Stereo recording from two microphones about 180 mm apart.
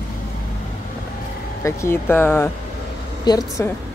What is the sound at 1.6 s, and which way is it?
A woman's voice, 15° left (ahead or behind).